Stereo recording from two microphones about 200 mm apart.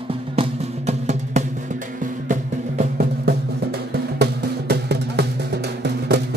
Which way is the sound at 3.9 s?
55° right (ahead or behind).